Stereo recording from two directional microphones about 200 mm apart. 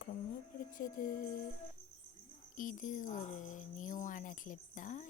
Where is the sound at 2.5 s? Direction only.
40° left (ahead or behind).